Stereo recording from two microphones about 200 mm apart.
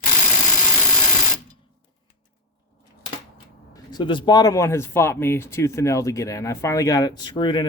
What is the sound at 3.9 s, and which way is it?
Speech, 25° left (ahead or behind).